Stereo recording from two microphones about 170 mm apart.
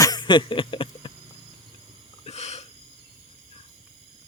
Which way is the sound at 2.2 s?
40° left (ahead or behind).